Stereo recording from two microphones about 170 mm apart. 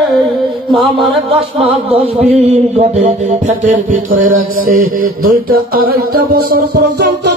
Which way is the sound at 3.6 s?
50° right (ahead or behind).